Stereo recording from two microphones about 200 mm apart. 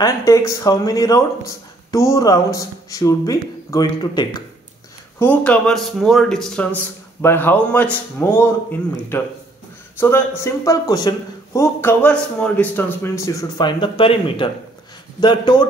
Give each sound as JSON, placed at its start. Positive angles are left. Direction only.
{"t": 0.0, "sound": "a man's voice", "side_deg": 15}
{"t": 5.2, "sound": "a man's voice", "side_deg": 5}
{"t": 9.9, "sound": "a man's voice", "side_deg": 10}